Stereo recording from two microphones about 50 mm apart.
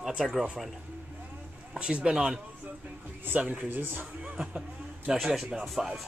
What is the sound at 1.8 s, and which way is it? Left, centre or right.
Speech, right.